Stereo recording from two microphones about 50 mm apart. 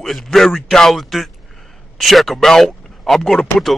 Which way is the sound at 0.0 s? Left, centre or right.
Centre.